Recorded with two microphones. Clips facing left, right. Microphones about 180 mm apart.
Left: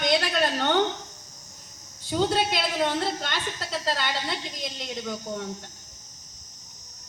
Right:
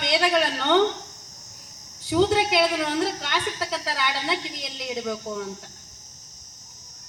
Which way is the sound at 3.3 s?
80° right.